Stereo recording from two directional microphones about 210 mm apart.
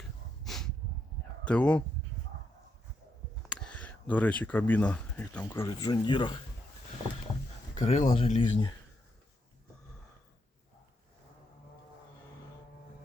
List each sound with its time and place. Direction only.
0.4 s snort: centre (ahead or behind)
1.5 s speech: 5° left (ahead or behind)
3.5 s speech: 5° left (ahead or behind); by 6.4 s 20° left (ahead or behind)
7.8 s speech: 30° left (ahead or behind)